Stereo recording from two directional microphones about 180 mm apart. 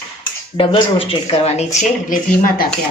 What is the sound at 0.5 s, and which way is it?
Speech, 30° left (ahead or behind).